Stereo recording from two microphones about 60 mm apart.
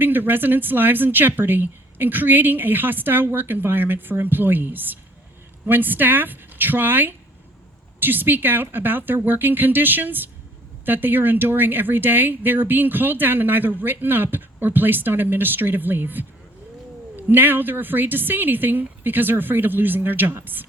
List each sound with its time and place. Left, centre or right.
0.0 s speech: right